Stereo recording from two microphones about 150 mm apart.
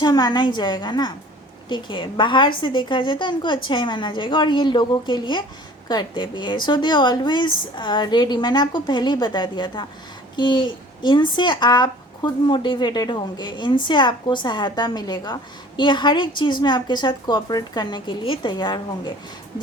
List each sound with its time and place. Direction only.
0.0 s a woman's voice: 25° left (ahead or behind)